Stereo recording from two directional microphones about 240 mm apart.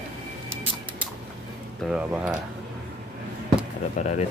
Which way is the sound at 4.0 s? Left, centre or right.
Left.